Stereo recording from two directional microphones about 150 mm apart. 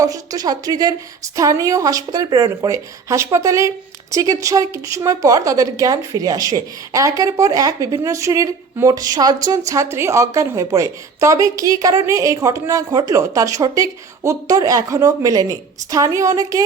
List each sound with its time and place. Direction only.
0.0 s a woman's voice: 25° right (ahead or behind)